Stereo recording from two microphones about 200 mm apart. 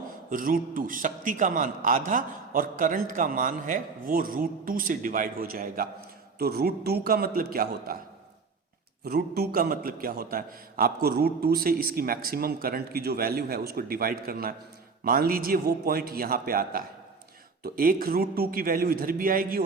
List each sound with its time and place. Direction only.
0.3 s a man's voice: 45° right (ahead or behind)
9.0 s a man's voice: 50° right (ahead or behind)